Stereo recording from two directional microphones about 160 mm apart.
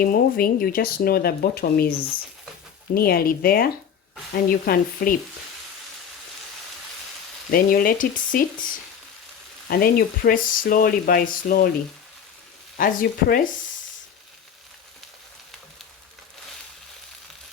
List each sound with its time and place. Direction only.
0.0 s speech: 60° left (ahead or behind)
7.5 s speech: 60° left (ahead or behind)
9.6 s speech: 70° left (ahead or behind)
12.7 s speech: 65° left (ahead or behind)